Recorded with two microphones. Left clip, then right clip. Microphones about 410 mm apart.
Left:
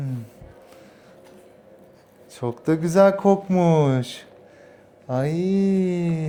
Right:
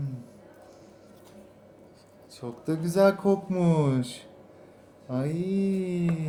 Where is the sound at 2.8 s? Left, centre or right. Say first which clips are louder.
Left 6 dB; left.